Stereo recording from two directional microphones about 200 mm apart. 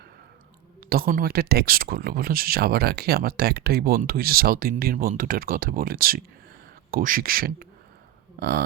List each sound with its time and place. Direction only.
0.8 s speech: 50° right (ahead or behind)